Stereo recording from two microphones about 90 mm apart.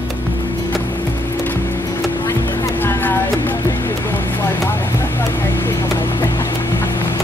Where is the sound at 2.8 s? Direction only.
20° left (ahead or behind).